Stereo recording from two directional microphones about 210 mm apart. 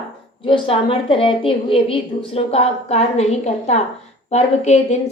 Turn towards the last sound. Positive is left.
turn(degrees=30)  # may be behind; listen again after turning